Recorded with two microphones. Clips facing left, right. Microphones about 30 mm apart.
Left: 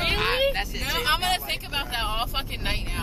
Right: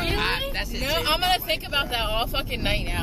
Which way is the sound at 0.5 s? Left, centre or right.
Centre.